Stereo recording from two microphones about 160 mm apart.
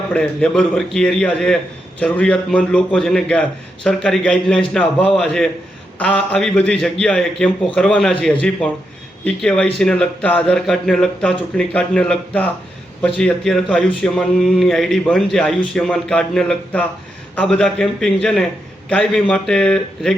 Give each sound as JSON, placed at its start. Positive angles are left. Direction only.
{"t": 0.1, "sound": "a man's voice", "side_deg": 5}